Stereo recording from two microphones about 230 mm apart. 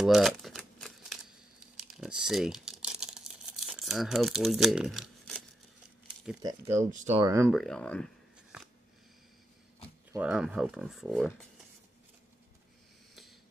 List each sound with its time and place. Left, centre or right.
0.0 s typewriter: centre
1.9 s crumpling: centre
6.4 s speech: right
7.2 s speech: centre
7.5 s a sound: centre
10.1 s speech: centre